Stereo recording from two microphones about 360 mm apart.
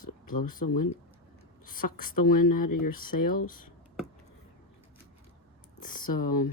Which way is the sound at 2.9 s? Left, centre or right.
Left.